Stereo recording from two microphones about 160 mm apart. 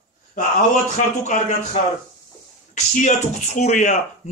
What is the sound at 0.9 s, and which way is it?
Speech, 50° left (ahead or behind).